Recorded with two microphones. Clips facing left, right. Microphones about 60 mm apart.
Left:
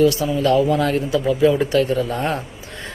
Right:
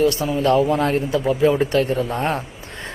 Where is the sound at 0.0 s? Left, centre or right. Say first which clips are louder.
Left 2 dB; right.